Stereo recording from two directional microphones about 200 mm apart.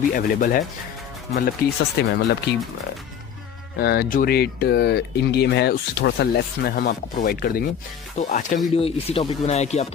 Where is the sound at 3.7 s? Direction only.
55° left (ahead or behind).